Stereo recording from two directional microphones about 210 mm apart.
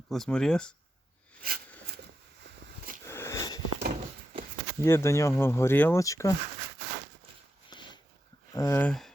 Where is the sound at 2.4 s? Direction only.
55° right (ahead or behind).